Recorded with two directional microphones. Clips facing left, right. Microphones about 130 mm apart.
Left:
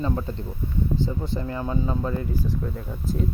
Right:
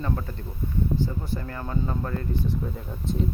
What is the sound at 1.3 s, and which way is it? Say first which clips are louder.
Speech: left 4 dB; 15° left (ahead or behind).